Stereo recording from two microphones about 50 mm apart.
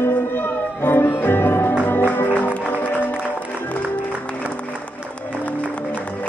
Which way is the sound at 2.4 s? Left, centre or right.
Left.